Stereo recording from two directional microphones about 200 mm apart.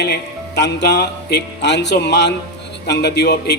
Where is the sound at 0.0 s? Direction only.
55° left (ahead or behind).